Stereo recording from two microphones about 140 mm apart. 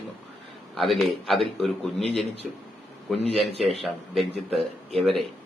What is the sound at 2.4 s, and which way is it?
Speech, centre (ahead or behind).